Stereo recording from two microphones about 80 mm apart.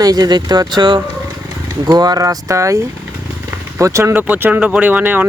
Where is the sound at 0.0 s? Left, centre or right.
Right.